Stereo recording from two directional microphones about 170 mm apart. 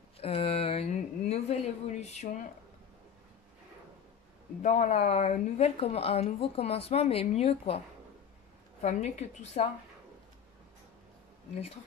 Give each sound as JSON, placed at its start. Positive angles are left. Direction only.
{"t": 0.2, "sound": "a sound", "side_deg": 35}
{"t": 4.6, "sound": "speech", "side_deg": 45}
{"t": 8.8, "sound": "speech", "side_deg": 40}